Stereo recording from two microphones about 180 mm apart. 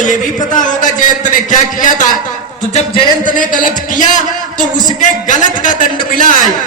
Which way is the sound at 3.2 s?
50° left (ahead or behind).